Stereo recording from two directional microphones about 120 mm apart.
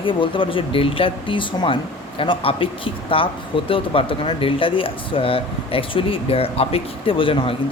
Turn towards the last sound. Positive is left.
turn(degrees=45)  # may be behind; listen again after turning